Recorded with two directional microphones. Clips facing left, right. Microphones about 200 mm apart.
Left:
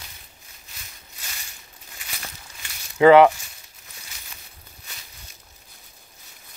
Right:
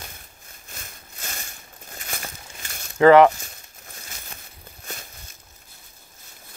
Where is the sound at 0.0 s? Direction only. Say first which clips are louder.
Right 5 dB; 50° right (ahead or behind).